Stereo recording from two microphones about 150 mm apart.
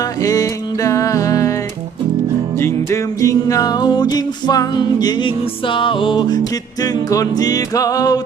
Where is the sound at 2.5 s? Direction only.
20° left (ahead or behind).